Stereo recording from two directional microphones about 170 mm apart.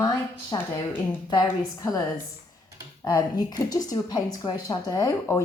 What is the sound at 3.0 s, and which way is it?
A woman's voice, 20° left (ahead or behind).